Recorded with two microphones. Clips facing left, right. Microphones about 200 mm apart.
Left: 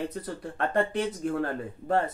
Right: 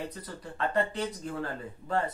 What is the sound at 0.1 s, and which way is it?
Speech, 55° left (ahead or behind).